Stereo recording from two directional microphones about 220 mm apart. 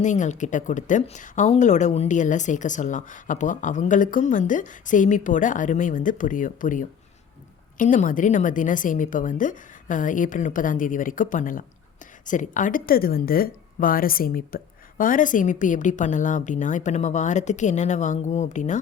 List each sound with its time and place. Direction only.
0.0 s a woman's voice: 35° left (ahead or behind)